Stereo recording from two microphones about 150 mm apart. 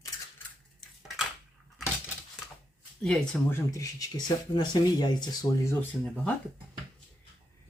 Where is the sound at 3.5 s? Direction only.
20° left (ahead or behind).